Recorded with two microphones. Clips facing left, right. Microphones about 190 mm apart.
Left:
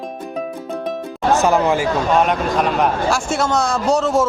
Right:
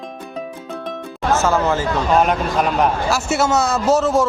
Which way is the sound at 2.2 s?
Centre (ahead or behind).